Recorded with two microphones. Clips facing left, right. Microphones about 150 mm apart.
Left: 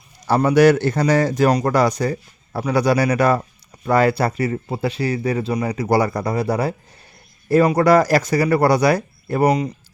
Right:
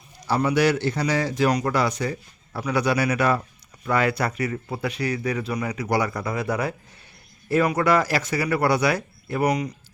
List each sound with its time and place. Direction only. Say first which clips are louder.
0.3 s a man's voice: left 7 dB; 50° left (ahead or behind); by 9.7 s 30° left (ahead or behind)